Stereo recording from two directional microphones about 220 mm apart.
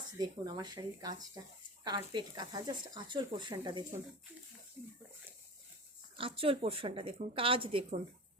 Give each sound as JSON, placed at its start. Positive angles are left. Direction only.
{"t": 0.2, "sound": "speech", "side_deg": -20}
{"t": 6.1, "sound": "speech", "side_deg": -25}